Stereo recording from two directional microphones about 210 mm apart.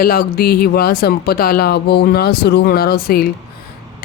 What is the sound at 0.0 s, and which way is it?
Speech, 45° left (ahead or behind).